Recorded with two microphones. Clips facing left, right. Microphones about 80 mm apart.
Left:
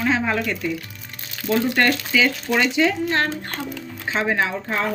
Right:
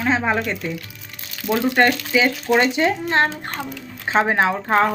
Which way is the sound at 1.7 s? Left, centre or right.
Right.